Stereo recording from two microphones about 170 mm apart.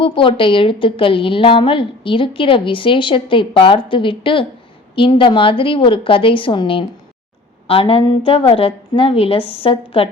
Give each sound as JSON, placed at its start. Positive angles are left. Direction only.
{"t": 0.0, "sound": "a woman's voice", "side_deg": 30}